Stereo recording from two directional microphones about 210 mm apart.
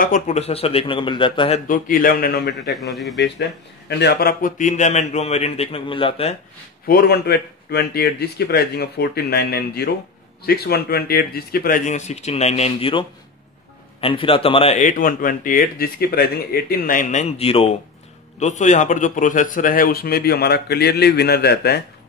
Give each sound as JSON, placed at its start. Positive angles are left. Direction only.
{"t": 0.0, "sound": "speech", "side_deg": 35}
{"t": 1.7, "sound": "a man's voice", "side_deg": 40}
{"t": 2.7, "sound": "speech", "side_deg": 0}
{"t": 3.2, "sound": "a man's voice", "side_deg": 55}
{"t": 6.9, "sound": "a man's voice", "side_deg": 45}
{"t": 14.0, "sound": "a man's voice", "side_deg": 25}